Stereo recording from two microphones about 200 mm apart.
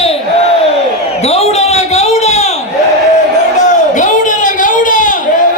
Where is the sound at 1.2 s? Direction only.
30° left (ahead or behind).